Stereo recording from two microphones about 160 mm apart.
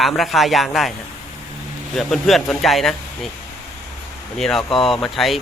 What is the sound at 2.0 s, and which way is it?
Speech, centre (ahead or behind).